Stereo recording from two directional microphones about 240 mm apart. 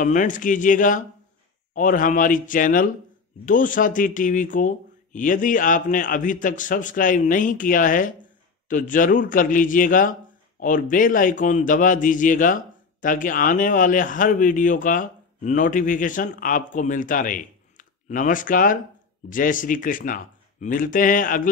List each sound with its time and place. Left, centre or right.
0.0 s a man's voice: left